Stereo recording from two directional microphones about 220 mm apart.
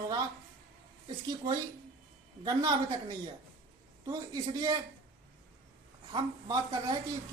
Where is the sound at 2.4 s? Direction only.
15° right (ahead or behind).